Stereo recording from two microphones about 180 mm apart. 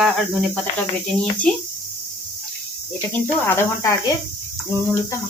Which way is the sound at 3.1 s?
15° left (ahead or behind).